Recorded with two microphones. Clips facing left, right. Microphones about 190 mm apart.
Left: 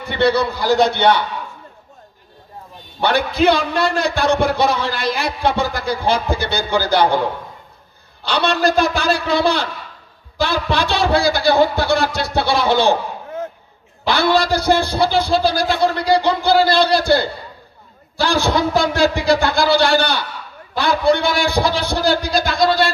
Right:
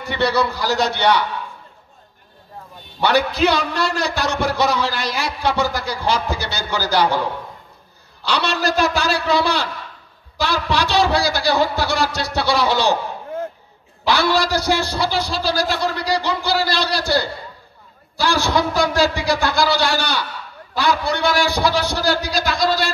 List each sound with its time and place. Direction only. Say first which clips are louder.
0.1 s a man's voice: left 3 dB; 55° left (ahead or behind)
3.0 s a man's voice: left 1 dB; 55° left (ahead or behind)
8.2 s a man's voice: left 4 dB; 55° left (ahead or behind)
14.0 s a man's voice: left 2 dB; 55° left (ahead or behind)